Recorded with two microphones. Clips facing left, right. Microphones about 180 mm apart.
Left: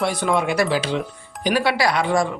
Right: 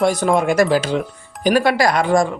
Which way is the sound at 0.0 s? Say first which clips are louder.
Right 5 dB; 45° right (ahead or behind).